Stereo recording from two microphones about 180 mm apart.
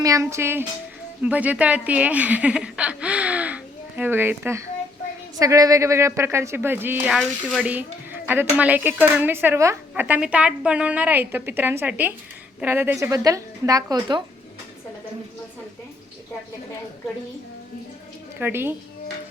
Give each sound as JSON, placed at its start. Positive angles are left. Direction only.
{"t": 0.0, "sound": "speech", "side_deg": -15}
{"t": 18.3, "sound": "speech", "side_deg": -10}